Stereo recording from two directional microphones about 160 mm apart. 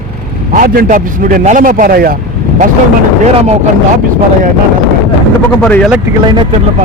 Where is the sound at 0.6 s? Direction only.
60° right (ahead or behind).